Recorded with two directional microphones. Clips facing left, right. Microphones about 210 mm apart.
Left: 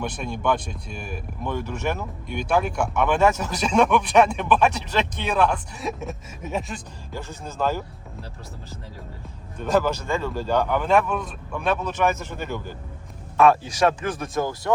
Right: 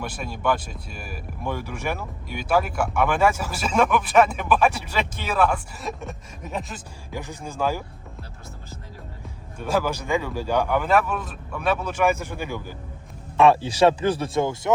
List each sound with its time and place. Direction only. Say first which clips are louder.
0.0 s speech: left 1 dB; 5° right (ahead or behind)
7.1 s a man's voice: right 1 dB; 15° right (ahead or behind)
9.6 s a man's voice: left 2 dB; 10° right (ahead or behind)
13.3 s speech: right 1 dB; 25° right (ahead or behind)